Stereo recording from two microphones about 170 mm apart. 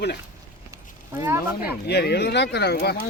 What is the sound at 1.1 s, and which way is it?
Speech, 15° right (ahead or behind).